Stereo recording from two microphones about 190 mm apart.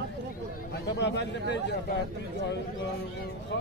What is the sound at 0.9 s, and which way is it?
Speech, 65° left (ahead or behind).